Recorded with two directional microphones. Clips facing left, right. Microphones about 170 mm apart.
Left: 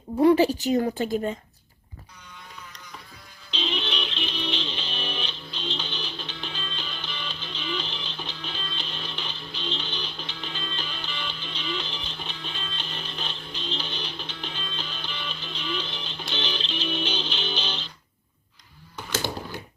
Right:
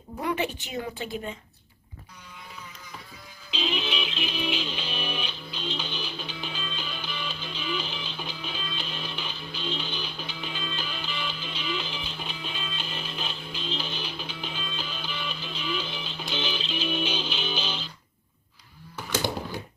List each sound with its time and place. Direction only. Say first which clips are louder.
0.2 s a woman's voice: left 11 dB; 35° left (ahead or behind)
3.5 s music: right 1 dB; 5° right (ahead or behind)